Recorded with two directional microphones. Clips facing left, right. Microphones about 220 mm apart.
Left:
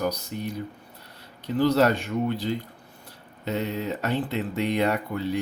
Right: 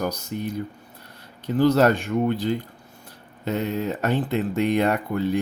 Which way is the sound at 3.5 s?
50° right (ahead or behind).